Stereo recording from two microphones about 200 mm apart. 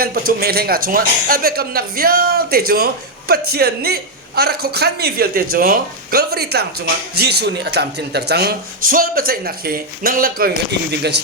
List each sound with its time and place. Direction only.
0.0 s speech: 50° right (ahead or behind)